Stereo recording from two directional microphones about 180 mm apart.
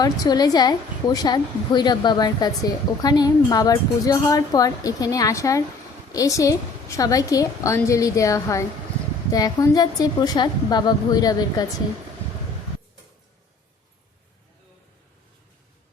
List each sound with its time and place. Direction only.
0.0 s a woman's voice: 20° left (ahead or behind)